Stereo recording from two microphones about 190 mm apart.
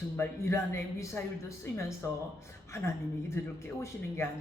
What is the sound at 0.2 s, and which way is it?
Speech, 15° left (ahead or behind).